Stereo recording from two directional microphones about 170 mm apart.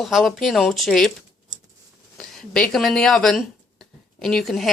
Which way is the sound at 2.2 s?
5° left (ahead or behind).